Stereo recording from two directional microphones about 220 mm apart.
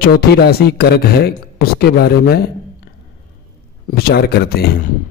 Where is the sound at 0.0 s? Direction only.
45° left (ahead or behind).